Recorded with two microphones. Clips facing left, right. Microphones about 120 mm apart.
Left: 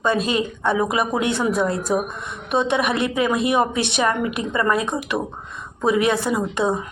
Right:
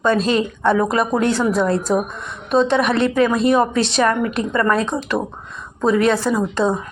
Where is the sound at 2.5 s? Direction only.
5° left (ahead or behind).